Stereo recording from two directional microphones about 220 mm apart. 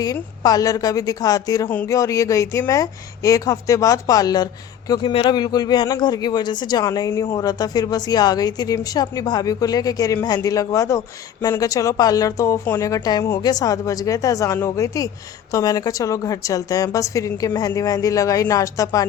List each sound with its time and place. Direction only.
0.0 s a man's voice: 15° left (ahead or behind)